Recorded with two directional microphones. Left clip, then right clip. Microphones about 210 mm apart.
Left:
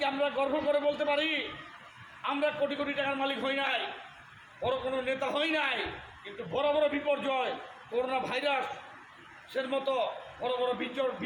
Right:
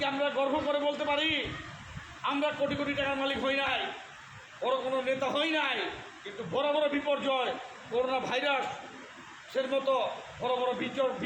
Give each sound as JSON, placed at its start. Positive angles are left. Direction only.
{"t": 0.0, "sound": "a man's voice", "side_deg": 5}